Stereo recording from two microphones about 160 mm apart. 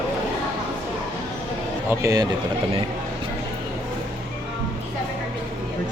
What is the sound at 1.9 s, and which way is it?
Speech, 20° right (ahead or behind).